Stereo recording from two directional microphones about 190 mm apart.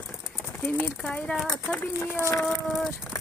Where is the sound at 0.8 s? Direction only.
5° left (ahead or behind).